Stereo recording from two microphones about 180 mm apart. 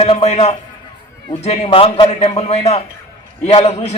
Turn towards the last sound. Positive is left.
turn(degrees=35)  # may be behind; listen again after turning